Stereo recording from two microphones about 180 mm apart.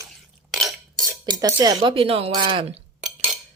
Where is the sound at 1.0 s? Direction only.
20° right (ahead or behind).